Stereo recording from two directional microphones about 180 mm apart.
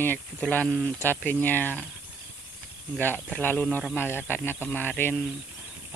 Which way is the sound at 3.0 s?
10° left (ahead or behind).